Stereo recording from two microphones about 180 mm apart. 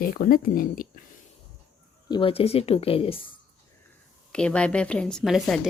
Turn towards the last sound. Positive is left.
turn(degrees=0)  # may be behind; listen again after turning